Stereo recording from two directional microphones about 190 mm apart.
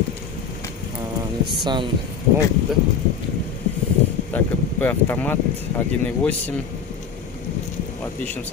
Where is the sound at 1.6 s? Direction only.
25° right (ahead or behind).